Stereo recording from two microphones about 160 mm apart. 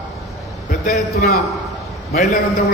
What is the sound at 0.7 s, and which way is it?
Speech, 50° left (ahead or behind).